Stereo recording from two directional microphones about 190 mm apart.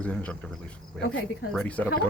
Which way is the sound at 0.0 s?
5° left (ahead or behind).